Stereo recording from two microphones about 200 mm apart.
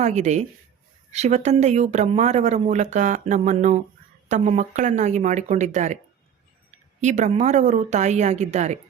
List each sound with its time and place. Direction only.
0.0 s speech: 35° right (ahead or behind)
7.0 s speech: 35° right (ahead or behind)